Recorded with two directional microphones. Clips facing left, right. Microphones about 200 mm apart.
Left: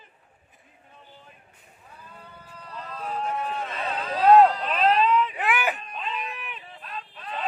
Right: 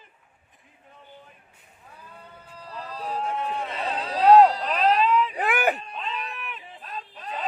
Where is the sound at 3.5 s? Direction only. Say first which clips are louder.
Right 1 dB; 25° right (ahead or behind).